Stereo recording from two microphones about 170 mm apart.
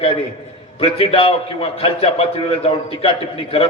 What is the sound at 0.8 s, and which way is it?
A man's voice, 35° left (ahead or behind).